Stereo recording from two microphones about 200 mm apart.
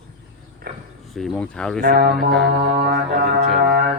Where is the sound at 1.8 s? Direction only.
45° right (ahead or behind).